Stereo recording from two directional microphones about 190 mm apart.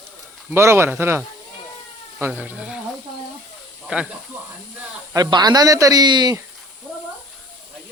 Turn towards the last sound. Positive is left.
turn(degrees=-20)  # may be behind; listen again after turning